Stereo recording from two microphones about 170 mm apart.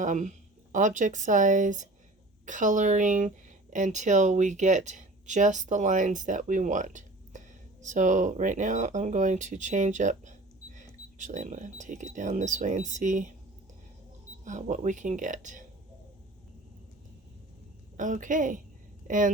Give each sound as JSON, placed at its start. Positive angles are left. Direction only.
{"t": 0.0, "sound": "speech", "side_deg": -45}
{"t": 14.4, "sound": "speech", "side_deg": -45}
{"t": 17.9, "sound": "speech", "side_deg": -50}